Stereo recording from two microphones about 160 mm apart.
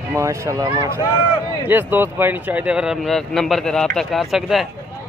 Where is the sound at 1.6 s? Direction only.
10° right (ahead or behind).